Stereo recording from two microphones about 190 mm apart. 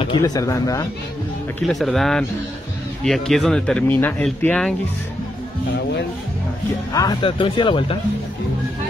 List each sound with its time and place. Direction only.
0.0 s speech: 25° left (ahead or behind)
1.7 s speech: centre (ahead or behind)
6.9 s speech: 20° left (ahead or behind)